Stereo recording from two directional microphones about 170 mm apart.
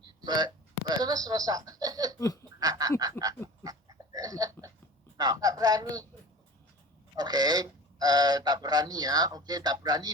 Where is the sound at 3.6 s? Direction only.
20° right (ahead or behind).